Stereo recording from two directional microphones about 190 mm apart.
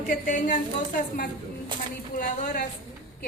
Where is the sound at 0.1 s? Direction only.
40° left (ahead or behind).